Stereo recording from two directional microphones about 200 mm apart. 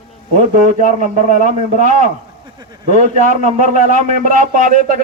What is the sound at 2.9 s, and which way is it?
A man's voice, 40° left (ahead or behind).